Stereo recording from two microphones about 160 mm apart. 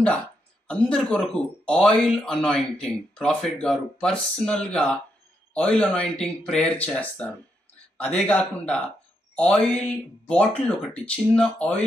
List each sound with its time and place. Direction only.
0.7 s speech: 5° left (ahead or behind)